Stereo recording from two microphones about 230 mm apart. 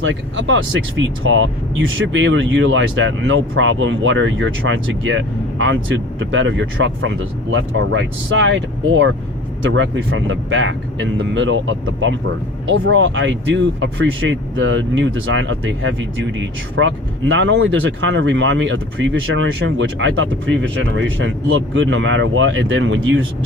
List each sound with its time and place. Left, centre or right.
0.0 s speech: right